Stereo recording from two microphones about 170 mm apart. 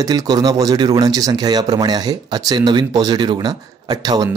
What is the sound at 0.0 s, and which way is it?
Speech, 20° right (ahead or behind).